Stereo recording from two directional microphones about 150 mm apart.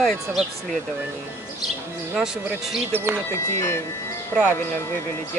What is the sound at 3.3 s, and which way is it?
Speech, 15° left (ahead or behind).